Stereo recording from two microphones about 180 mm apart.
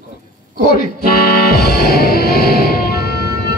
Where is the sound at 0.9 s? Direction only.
60° left (ahead or behind).